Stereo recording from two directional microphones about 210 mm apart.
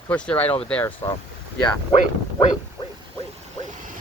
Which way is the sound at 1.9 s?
30° left (ahead or behind).